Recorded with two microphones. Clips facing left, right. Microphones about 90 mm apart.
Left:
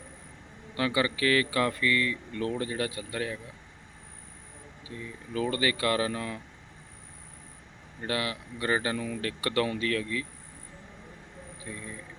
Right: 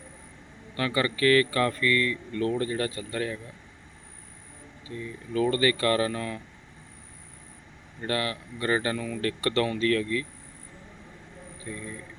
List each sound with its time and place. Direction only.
0.8 s speech: 15° left (ahead or behind)
4.9 s speech: 15° left (ahead or behind)
8.0 s speech: 15° left (ahead or behind)
11.6 s speech: 10° left (ahead or behind)